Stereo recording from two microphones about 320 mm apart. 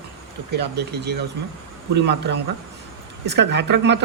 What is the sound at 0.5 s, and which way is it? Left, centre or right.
Speech, right.